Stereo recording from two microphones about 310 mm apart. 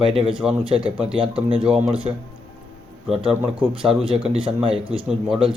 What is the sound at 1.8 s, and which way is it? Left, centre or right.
Speech, centre.